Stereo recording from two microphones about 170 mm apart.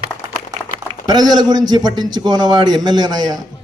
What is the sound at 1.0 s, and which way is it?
A man's voice, 25° right (ahead or behind).